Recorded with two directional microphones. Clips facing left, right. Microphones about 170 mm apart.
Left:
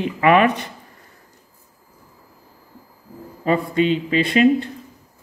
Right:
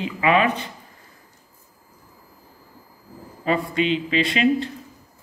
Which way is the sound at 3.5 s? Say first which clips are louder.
Left 3 dB; 45° left (ahead or behind).